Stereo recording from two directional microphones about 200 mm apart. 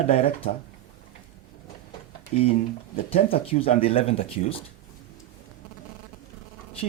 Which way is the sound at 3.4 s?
30° left (ahead or behind).